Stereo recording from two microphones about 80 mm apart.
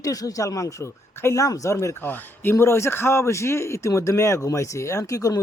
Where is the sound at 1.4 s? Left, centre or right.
Left.